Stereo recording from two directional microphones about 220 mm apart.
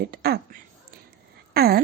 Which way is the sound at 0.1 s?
45° right (ahead or behind).